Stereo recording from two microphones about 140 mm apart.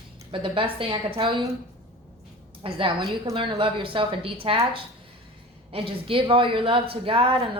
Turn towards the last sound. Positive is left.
turn(degrees=-40)  # may be behind; listen again after turning